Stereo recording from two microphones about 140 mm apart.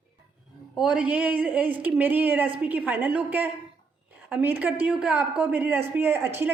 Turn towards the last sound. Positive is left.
turn(degrees=-15)  # may be behind; listen again after turning